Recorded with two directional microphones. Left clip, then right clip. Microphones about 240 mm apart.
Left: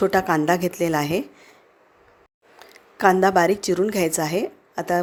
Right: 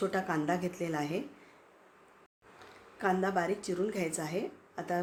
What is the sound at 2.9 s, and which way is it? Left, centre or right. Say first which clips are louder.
A woman's voice: left 14 dB; left.